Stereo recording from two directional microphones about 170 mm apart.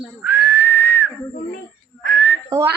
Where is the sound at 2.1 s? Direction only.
85° right.